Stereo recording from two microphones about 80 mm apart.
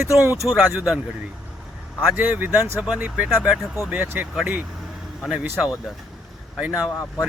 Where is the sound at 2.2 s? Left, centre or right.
Right.